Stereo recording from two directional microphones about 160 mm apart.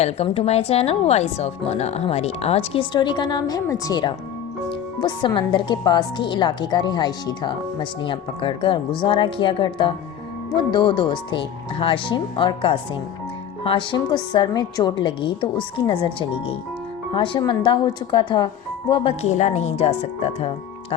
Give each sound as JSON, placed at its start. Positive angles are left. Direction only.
{"t": 0.0, "sound": "speech", "side_deg": 40}
{"t": 19.2, "sound": "speech", "side_deg": 45}